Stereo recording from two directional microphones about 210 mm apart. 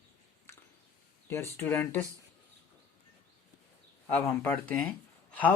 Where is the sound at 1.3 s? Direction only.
10° left (ahead or behind).